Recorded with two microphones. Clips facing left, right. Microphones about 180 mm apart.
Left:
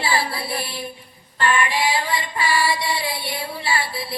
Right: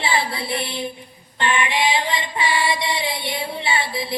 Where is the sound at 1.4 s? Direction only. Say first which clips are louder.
Even; 20° right (ahead or behind).